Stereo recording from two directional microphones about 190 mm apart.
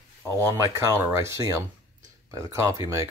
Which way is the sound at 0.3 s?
15° right (ahead or behind).